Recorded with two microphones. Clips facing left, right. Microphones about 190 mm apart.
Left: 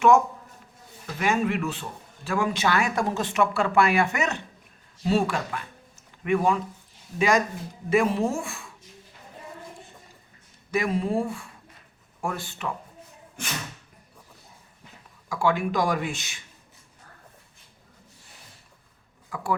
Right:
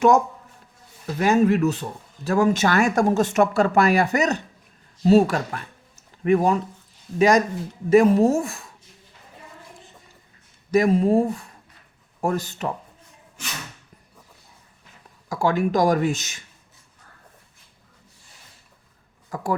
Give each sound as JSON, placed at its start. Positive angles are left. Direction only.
{"t": 1.0, "sound": "speech", "side_deg": -40}
{"t": 10.7, "sound": "speech", "side_deg": -40}
{"t": 15.3, "sound": "speech", "side_deg": -40}
{"t": 19.3, "sound": "a man's voice", "side_deg": -40}